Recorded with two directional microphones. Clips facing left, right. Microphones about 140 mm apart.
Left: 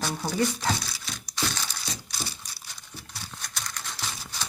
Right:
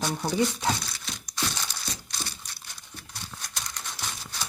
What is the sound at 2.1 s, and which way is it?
Crumpling, 10° left (ahead or behind).